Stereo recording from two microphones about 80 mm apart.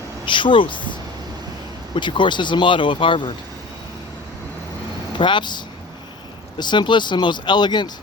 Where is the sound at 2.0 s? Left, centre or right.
Left.